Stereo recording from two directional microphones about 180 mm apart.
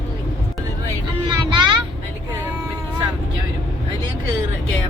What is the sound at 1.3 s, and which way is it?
Vehicle, 25° right (ahead or behind).